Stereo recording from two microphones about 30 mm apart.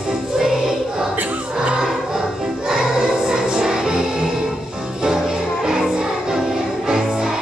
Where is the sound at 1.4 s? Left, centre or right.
Right.